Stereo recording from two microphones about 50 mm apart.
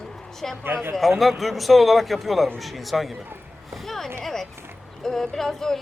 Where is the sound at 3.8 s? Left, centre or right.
Centre.